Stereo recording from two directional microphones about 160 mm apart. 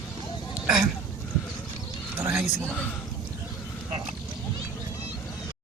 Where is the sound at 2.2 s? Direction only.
5° right (ahead or behind).